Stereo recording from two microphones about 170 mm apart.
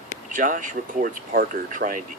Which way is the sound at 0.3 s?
50° right (ahead or behind).